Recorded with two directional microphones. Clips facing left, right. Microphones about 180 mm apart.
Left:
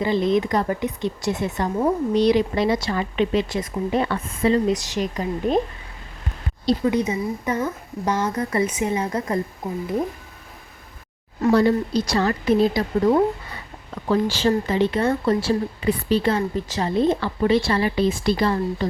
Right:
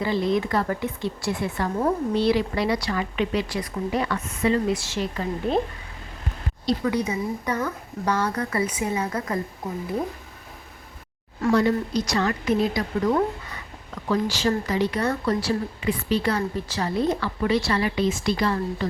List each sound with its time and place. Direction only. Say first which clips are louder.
0.0 s a woman's voice: left 3 dB; 20° left (ahead or behind)
4.7 s a woman's voice: left 3 dB; 15° left (ahead or behind)
6.7 s a woman's voice: left 4 dB; 25° left (ahead or behind)
8.0 s a woman's voice: left 1 dB; 10° left (ahead or behind)
8.4 s a woman's voice: left 3 dB; 25° left (ahead or behind)
11.5 s a woman's voice: left 3 dB; 30° left (ahead or behind)